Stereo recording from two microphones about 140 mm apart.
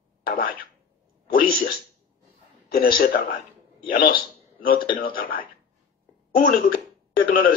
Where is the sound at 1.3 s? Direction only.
90° left.